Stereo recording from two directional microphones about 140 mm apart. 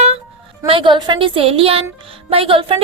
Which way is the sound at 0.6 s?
40° right (ahead or behind).